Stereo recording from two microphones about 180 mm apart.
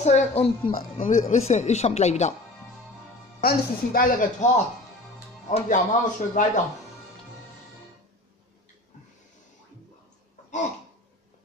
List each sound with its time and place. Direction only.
0.0 s speech: 40° left (ahead or behind)
3.3 s speech: 50° left (ahead or behind)
5.5 s speech: 45° left (ahead or behind)